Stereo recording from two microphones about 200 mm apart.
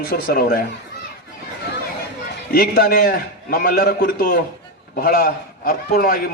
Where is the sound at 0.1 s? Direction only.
45° left (ahead or behind).